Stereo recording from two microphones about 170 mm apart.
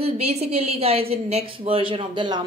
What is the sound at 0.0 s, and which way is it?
A woman's voice, 35° right (ahead or behind).